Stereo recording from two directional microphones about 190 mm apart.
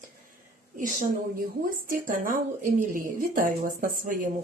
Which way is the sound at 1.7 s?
45° right (ahead or behind).